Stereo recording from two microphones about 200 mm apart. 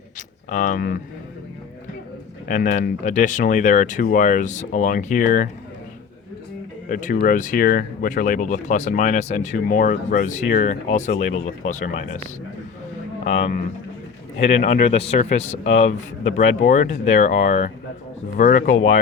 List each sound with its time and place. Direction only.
0.5 s speech: 40° left (ahead or behind)
2.5 s speech: 40° left (ahead or behind)
6.8 s speech: 40° left (ahead or behind)
14.3 s speech: 30° left (ahead or behind)